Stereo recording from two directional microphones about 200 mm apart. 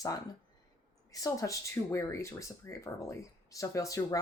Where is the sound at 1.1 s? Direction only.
15° left (ahead or behind).